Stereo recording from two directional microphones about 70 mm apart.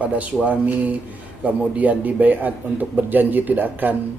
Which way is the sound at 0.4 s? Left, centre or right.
Right.